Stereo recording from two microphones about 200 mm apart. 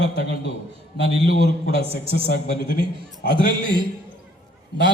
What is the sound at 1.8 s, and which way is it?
Speech, 30° right (ahead or behind).